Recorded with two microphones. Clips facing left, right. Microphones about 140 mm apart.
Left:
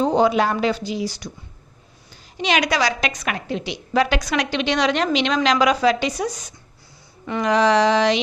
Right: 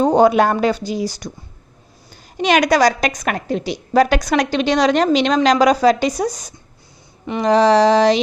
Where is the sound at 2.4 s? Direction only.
45° right (ahead or behind).